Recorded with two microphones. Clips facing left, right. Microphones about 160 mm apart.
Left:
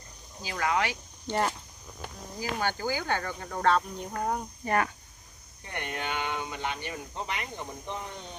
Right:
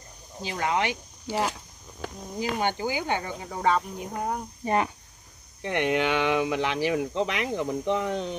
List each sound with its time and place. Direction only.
0.4 s speech: 25° right (ahead or behind)
1.2 s speech: 5° right (ahead or behind)
2.3 s speech: 20° right (ahead or behind)
4.6 s speech: 20° right (ahead or behind)
5.6 s speech: 90° right